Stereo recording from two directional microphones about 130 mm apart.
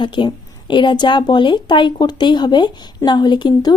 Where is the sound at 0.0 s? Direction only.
40° left (ahead or behind).